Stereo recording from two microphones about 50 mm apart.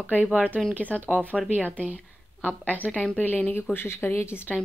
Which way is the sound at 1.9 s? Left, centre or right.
Right.